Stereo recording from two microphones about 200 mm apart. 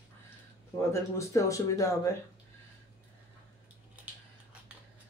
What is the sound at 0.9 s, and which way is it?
Speech, 15° left (ahead or behind).